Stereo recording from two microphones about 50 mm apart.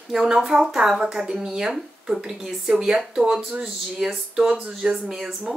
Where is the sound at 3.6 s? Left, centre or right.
Centre.